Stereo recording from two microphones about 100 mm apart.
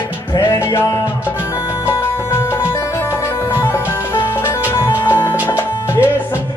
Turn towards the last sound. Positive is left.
turn(degrees=25)  # may be behind; listen again after turning